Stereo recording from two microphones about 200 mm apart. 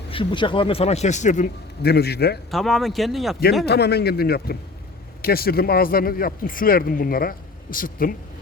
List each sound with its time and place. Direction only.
0.1 s a man's voice: 25° left (ahead or behind)
1.8 s speech: 50° left (ahead or behind)
2.5 s speech: centre (ahead or behind)
3.7 s speech: 55° left (ahead or behind)